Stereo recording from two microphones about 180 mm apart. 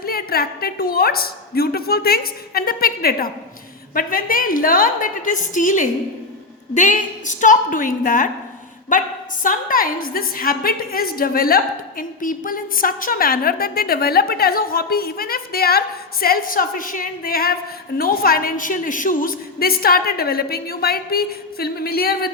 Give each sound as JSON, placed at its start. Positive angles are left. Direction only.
{"t": 0.0, "sound": "a woman's voice", "side_deg": 55}